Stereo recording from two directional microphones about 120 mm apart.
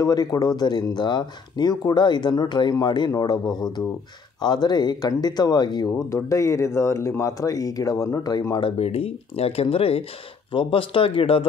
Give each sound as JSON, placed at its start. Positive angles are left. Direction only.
{"t": 0.0, "sound": "speech", "side_deg": 35}
{"t": 8.6, "sound": "speech", "side_deg": 55}